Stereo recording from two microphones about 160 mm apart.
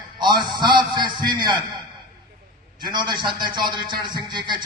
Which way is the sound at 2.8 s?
25° right (ahead or behind).